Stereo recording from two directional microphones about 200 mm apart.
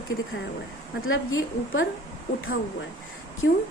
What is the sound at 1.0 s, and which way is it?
Speech, 90° left.